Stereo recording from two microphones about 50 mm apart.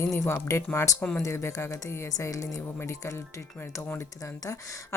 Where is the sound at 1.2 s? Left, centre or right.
Left.